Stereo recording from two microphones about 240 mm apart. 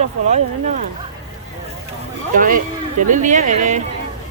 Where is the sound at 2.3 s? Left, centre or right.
Right.